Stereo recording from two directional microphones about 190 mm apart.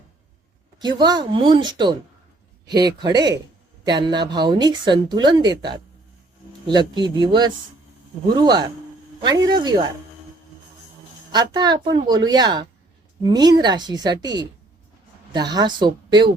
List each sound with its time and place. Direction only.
0.8 s speech: 25° right (ahead or behind)
11.3 s speech: 20° right (ahead or behind)